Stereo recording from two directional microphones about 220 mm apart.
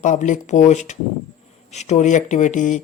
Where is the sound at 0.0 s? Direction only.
35° left (ahead or behind).